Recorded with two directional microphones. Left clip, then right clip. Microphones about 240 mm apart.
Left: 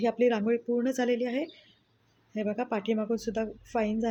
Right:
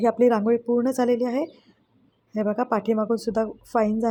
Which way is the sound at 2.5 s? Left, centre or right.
Right.